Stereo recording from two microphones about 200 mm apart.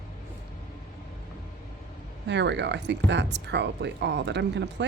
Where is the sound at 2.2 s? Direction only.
60° right (ahead or behind).